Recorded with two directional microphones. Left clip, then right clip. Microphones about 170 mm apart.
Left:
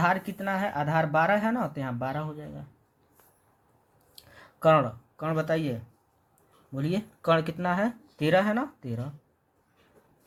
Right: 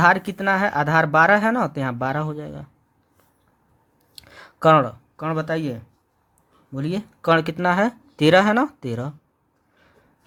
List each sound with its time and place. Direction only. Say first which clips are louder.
0.0 s speech: right 9 dB; 55° right (ahead or behind)
4.1 s a sound: right 8 dB; 40° right (ahead or behind); by 5.8 s 25° right (ahead or behind)
6.7 s speech: right 4 dB; 25° right (ahead or behind); by 9.0 s 55° right (ahead or behind)